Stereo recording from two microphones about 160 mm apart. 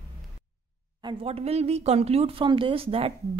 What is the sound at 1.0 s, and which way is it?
Speech, 35° right (ahead or behind).